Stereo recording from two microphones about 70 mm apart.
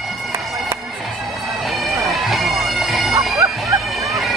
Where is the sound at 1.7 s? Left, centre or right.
Centre.